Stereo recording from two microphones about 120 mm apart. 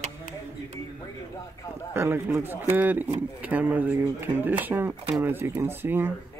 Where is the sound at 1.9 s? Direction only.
20° right (ahead or behind).